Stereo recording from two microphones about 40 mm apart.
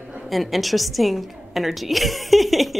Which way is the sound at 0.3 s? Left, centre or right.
Centre.